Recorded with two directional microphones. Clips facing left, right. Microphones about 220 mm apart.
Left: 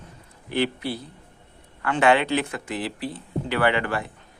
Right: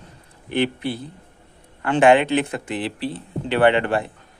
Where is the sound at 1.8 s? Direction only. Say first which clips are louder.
Right 5 dB; 20° right (ahead or behind).